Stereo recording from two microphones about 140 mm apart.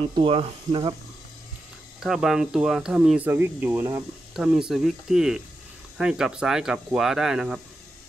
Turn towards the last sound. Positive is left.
turn(degrees=-5)  # may be behind; listen again after turning